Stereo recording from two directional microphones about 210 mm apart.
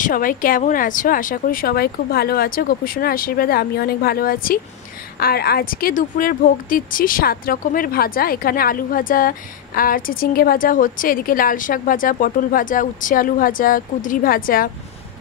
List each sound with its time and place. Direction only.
0.0 s a woman's voice: 40° left (ahead or behind)